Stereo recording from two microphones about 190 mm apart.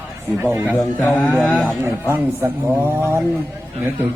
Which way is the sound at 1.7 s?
10° right (ahead or behind).